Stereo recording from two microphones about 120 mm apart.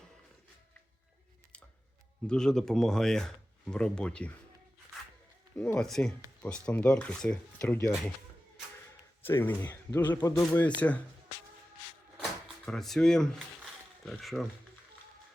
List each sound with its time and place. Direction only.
2.2 s speech: 5° left (ahead or behind)
5.5 s speech: 10° left (ahead or behind)
9.2 s speech: 20° left (ahead or behind)
12.6 s speech: 5° left (ahead or behind)